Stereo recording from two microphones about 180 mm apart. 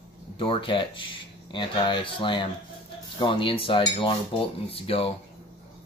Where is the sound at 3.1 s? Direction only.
25° left (ahead or behind).